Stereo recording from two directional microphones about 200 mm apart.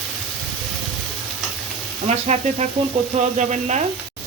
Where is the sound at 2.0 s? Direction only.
35° right (ahead or behind).